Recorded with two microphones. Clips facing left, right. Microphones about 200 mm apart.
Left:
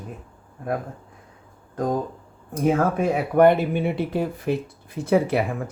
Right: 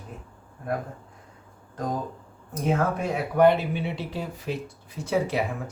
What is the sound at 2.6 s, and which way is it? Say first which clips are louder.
Speech: left 5 dB; 55° left (ahead or behind).